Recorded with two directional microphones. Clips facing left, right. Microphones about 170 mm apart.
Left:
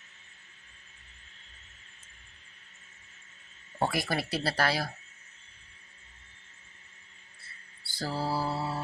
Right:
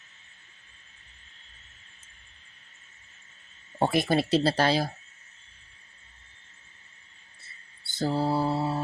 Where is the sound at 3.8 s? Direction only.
25° right (ahead or behind).